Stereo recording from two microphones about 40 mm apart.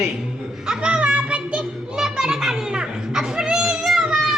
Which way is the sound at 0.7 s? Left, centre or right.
Right.